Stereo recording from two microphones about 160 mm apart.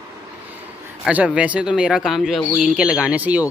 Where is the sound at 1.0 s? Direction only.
5° right (ahead or behind).